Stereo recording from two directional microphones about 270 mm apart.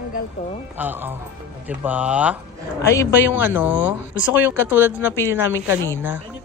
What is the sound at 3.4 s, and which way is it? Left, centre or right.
Speech, centre.